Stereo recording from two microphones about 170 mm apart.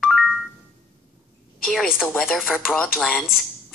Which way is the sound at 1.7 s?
Centre (ahead or behind).